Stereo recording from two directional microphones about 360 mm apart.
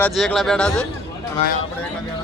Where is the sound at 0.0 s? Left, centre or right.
Centre.